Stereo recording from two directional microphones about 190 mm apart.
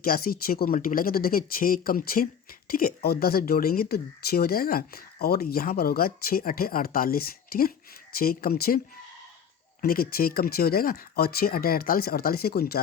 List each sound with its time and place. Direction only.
0.0 s speech: 50° left (ahead or behind)
9.8 s speech: 50° left (ahead or behind)